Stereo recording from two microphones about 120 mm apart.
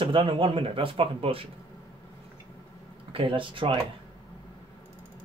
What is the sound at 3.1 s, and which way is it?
Speech, 45° right (ahead or behind).